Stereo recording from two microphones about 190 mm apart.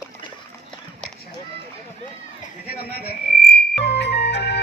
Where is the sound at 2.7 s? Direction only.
55° left (ahead or behind).